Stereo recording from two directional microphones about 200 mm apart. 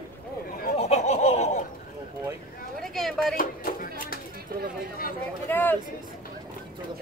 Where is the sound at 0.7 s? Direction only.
35° left (ahead or behind).